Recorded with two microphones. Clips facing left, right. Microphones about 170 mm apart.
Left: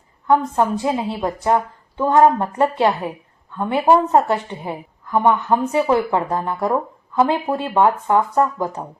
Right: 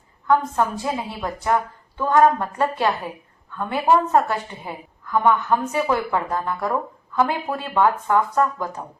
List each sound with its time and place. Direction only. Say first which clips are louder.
0.3 s a woman's voice: left 3 dB; 25° left (ahead or behind)